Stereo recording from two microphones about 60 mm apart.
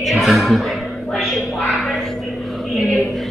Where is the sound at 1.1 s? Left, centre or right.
Centre.